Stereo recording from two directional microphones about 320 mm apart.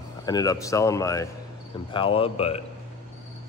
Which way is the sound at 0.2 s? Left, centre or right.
Centre.